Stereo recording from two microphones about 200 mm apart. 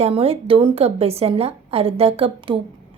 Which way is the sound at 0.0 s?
30° right (ahead or behind).